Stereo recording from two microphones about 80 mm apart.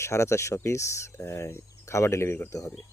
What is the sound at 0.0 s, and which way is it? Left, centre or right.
Speech, left.